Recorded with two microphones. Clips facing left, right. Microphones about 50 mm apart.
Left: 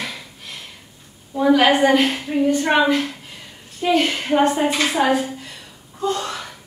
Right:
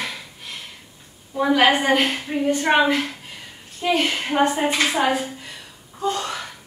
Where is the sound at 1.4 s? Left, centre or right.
Centre.